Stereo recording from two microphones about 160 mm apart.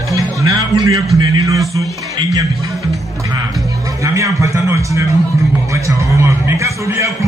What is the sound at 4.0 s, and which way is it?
A man's voice, 20° right (ahead or behind).